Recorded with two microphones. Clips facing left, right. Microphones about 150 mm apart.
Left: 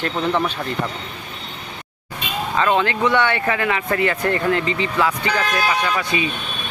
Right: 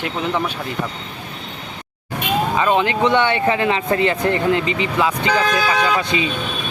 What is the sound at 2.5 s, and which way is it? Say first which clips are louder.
Speech: left 1 dB; 15° right (ahead or behind).